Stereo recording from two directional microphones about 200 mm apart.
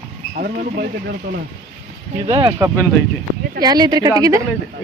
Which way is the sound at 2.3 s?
20° right (ahead or behind).